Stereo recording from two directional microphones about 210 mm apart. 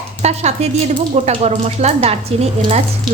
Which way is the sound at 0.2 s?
30° right (ahead or behind).